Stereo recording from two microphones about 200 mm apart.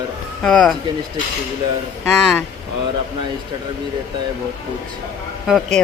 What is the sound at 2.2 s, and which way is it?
Speech, 5° left (ahead or behind).